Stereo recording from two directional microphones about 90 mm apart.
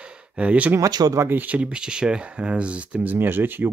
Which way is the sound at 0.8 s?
45° right (ahead or behind).